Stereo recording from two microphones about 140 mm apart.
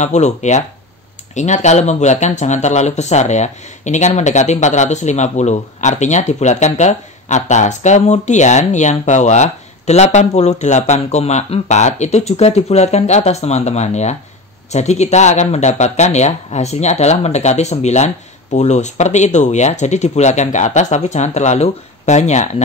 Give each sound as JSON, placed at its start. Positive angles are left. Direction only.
{"t": 0.0, "sound": "speech", "side_deg": 55}